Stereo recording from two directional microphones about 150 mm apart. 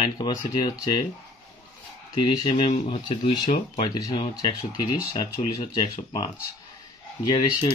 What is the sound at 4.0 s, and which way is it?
Speech, 25° left (ahead or behind).